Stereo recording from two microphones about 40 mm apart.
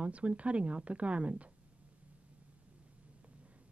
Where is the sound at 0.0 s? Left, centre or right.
Right.